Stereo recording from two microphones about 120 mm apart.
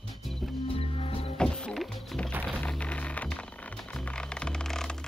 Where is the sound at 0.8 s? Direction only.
55° left (ahead or behind).